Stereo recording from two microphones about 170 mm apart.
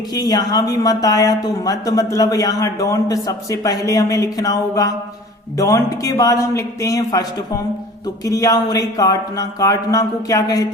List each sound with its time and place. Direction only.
0.1 s speech: 25° left (ahead or behind)